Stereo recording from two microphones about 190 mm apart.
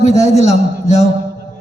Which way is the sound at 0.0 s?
35° left (ahead or behind).